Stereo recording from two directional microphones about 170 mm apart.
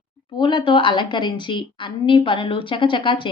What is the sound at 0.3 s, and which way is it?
A woman's voice, 25° left (ahead or behind).